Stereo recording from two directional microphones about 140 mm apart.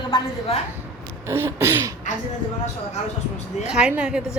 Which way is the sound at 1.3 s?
20° right (ahead or behind).